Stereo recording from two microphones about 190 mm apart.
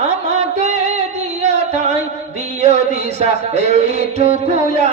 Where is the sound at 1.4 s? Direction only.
35° right (ahead or behind).